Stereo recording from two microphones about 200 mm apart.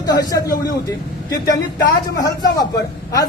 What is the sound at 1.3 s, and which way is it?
Speech, 60° left (ahead or behind).